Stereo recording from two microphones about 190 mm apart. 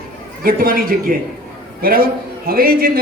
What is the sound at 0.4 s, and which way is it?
Speech, 50° right (ahead or behind).